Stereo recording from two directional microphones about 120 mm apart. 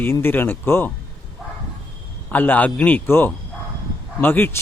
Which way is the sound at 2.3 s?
15° left (ahead or behind).